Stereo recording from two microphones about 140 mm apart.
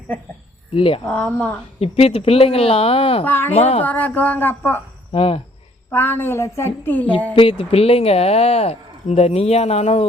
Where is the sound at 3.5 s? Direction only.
50° left (ahead or behind).